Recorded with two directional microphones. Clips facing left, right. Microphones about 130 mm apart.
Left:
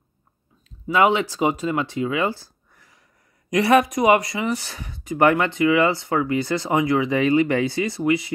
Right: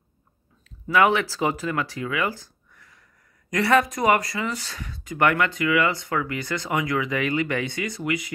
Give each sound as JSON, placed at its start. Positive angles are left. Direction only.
{"t": 0.8, "sound": "speech", "side_deg": 20}